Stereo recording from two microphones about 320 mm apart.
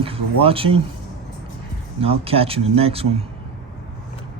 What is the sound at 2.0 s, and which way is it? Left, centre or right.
Speech, centre.